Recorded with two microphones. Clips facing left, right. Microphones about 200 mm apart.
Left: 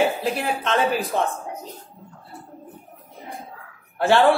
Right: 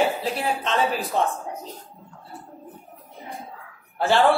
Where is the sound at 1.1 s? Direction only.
55° left (ahead or behind).